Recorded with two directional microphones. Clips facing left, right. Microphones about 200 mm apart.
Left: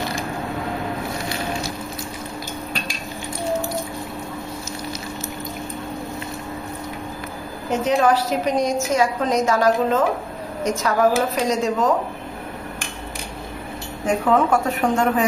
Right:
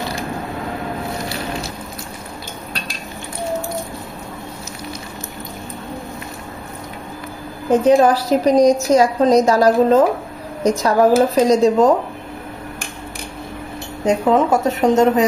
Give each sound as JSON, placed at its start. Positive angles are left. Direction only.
{"t": 7.7, "sound": "a woman's voice", "side_deg": -35}
{"t": 14.0, "sound": "speech", "side_deg": -20}